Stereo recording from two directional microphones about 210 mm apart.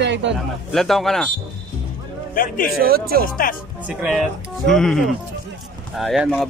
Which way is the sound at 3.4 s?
45° left (ahead or behind).